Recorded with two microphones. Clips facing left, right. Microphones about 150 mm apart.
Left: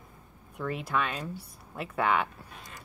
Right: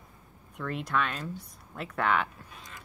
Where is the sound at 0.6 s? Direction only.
5° left (ahead or behind).